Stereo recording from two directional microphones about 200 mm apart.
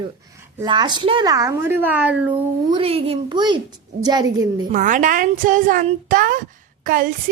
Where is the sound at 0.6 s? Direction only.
20° right (ahead or behind).